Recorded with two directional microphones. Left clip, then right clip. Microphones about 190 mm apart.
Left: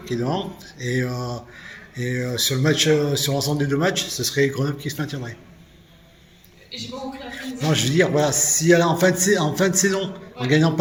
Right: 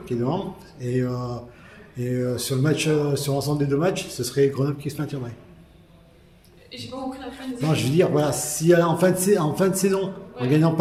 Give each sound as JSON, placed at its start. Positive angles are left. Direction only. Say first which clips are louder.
{"t": 0.0, "sound": "speech", "louder": "left 1 dB", "side_deg": -5}
{"t": 6.7, "sound": "a man's voice", "louder": "left 4 dB", "side_deg": -20}
{"t": 7.7, "sound": "speech", "louder": "left 1 dB", "side_deg": -10}